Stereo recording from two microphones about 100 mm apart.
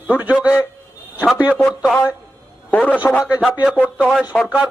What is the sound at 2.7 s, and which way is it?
Speech, 15° left (ahead or behind).